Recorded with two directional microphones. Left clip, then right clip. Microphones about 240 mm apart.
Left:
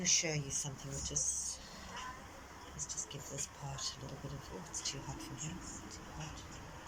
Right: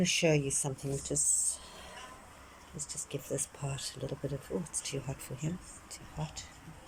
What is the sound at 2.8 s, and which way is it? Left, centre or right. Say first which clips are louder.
Speech: right 4 dB; right.